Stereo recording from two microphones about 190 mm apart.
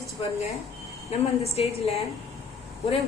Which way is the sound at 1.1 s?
35° left (ahead or behind).